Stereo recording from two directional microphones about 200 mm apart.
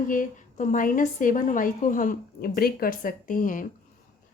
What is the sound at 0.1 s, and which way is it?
A woman's voice, 40° left (ahead or behind).